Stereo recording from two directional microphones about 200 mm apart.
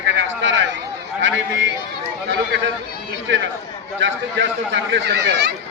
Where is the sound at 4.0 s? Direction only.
65° right (ahead or behind).